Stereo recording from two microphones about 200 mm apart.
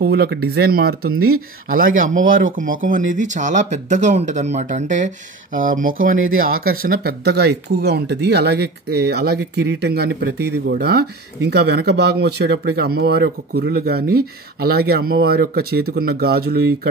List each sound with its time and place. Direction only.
0.0 s speech: 55° right (ahead or behind)
1.1 s speech: 90° right
1.7 s speech: 45° right (ahead or behind)